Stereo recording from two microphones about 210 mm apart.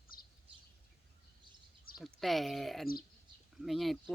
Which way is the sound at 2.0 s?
Centre (ahead or behind).